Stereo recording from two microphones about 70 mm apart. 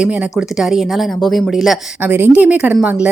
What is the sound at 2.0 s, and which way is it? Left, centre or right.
Speech, right.